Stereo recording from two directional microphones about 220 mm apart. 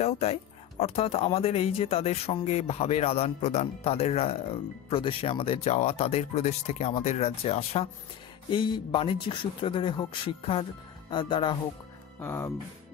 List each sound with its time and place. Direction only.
0.0 s speech: 30° left (ahead or behind); by 12.5 s 10° left (ahead or behind)